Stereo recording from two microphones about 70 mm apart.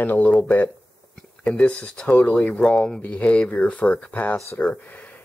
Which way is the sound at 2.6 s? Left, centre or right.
Centre.